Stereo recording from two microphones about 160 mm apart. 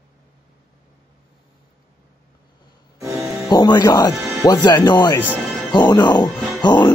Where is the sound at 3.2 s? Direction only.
20° right (ahead or behind).